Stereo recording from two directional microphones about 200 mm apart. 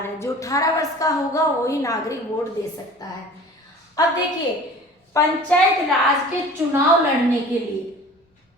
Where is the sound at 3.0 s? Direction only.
20° left (ahead or behind).